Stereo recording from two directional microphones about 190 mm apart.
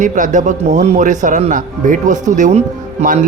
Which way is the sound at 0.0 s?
40° right (ahead or behind).